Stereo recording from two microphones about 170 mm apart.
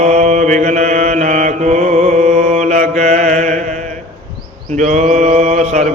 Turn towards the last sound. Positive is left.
turn(degrees=-45)  # may be behind; listen again after turning